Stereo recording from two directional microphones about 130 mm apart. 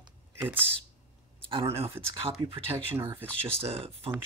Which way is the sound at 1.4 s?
40° right (ahead or behind).